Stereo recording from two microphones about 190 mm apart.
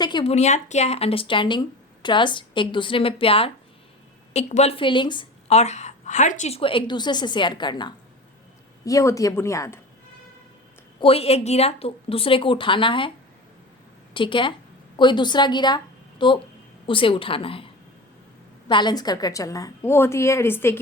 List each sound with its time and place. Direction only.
0.0 s a woman's voice: 25° left (ahead or behind)
0.3 s a woman's voice: 35° left (ahead or behind); by 9.8 s 15° left (ahead or behind)
11.0 s a woman's voice: 30° left (ahead or behind)
14.1 s a woman's voice: 25° left (ahead or behind)
18.7 s a woman's voice: 25° left (ahead or behind)